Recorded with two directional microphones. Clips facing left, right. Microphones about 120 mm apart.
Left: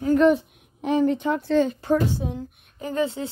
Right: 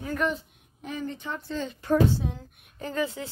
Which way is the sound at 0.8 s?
80° left.